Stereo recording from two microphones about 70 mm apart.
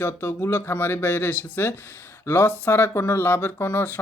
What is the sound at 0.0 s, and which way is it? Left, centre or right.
Speech, left.